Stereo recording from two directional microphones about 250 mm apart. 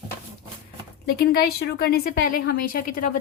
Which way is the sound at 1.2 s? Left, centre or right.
Left.